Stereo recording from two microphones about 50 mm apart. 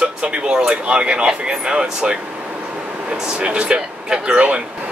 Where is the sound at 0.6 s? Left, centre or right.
Centre.